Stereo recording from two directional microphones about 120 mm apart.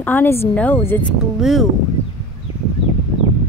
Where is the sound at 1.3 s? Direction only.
Centre (ahead or behind).